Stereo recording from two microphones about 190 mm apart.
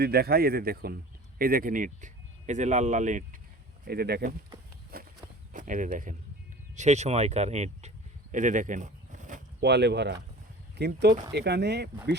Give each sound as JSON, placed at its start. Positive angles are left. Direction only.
{"t": 0.0, "sound": "speech", "side_deg": -55}
{"t": 3.8, "sound": "speech", "side_deg": -55}
{"t": 4.9, "sound": "walk", "side_deg": -50}
{"t": 5.5, "sound": "speech", "side_deg": -45}
{"t": 9.6, "sound": "speech", "side_deg": -65}